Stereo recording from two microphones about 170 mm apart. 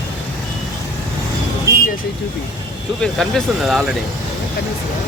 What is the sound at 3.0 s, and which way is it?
Speech, centre (ahead or behind).